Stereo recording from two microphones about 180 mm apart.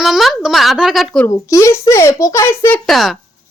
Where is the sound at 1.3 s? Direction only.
15° left (ahead or behind).